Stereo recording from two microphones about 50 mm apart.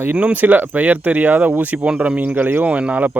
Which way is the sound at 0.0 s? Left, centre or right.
Right.